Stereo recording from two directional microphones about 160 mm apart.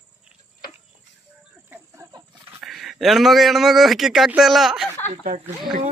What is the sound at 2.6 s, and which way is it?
A man's voice, centre (ahead or behind).